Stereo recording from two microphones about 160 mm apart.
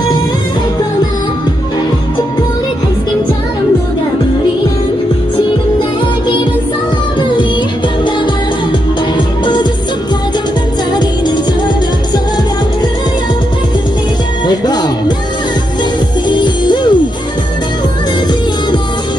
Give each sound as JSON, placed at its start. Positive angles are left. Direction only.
{"t": 9.4, "sound": "music", "side_deg": 30}
{"t": 11.0, "sound": "music", "side_deg": 25}
{"t": 14.4, "sound": "music", "side_deg": 25}
{"t": 16.3, "sound": "music", "side_deg": 30}